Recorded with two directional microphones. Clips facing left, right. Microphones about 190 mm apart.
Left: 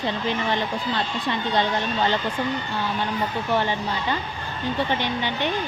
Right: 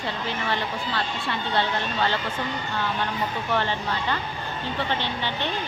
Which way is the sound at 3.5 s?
15° left (ahead or behind).